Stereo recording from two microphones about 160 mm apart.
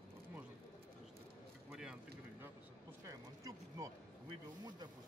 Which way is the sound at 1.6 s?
5° right (ahead or behind).